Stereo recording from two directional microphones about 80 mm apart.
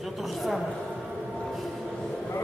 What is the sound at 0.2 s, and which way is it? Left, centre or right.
Speech, centre.